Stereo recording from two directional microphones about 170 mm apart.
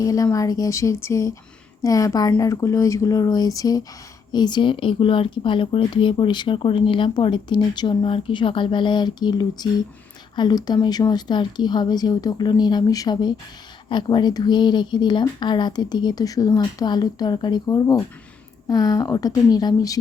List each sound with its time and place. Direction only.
0.0 s speech: 20° left (ahead or behind)